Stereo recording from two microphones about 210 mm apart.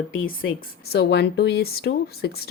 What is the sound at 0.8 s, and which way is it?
Speech, 50° left (ahead or behind).